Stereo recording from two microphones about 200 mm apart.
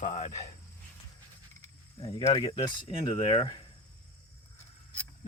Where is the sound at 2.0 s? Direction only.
20° left (ahead or behind).